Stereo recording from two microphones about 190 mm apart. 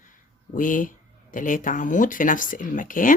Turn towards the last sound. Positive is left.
turn(degrees=45)  # may be behind; listen again after turning